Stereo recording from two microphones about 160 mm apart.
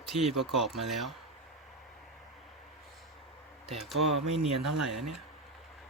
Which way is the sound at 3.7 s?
Centre (ahead or behind).